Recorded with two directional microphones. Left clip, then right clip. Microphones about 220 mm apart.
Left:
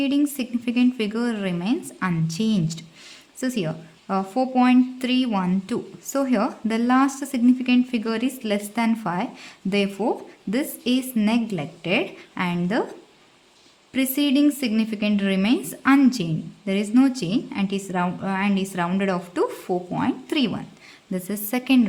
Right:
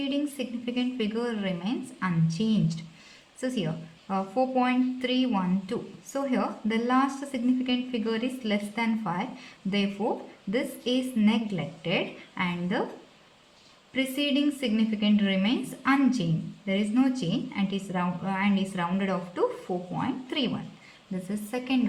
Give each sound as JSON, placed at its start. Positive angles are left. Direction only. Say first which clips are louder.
{"t": 0.0, "sound": "a woman's voice", "louder": "left 7 dB", "side_deg": 45}
{"t": 13.9, "sound": "a woman's voice", "louder": "left 5 dB", "side_deg": 45}